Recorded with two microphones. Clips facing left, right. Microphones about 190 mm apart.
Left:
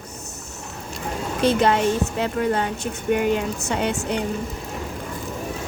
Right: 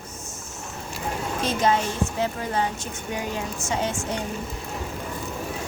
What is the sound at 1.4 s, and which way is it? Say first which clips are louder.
Speech: left 5 dB; 65° left (ahead or behind).